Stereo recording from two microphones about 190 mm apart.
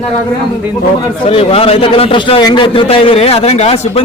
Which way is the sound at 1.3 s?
30° left (ahead or behind).